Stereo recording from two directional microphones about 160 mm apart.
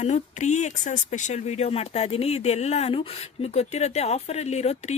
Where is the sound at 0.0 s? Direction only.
45° left (ahead or behind).